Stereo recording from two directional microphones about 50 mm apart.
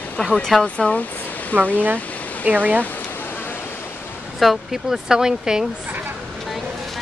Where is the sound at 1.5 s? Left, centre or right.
Right.